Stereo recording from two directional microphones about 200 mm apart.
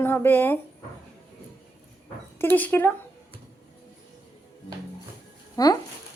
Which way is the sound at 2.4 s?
10° left (ahead or behind).